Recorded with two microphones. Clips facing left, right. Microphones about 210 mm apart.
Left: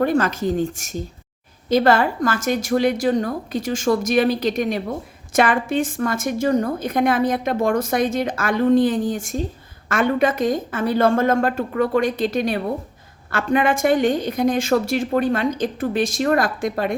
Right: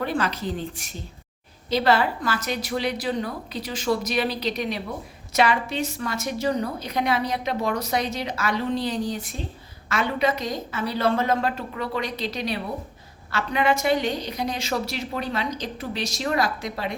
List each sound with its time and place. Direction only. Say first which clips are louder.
0.0 s a woman's voice: left 7 dB; 45° left (ahead or behind)